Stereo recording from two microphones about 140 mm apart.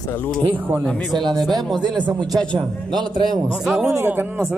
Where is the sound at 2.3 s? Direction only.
35° right (ahead or behind).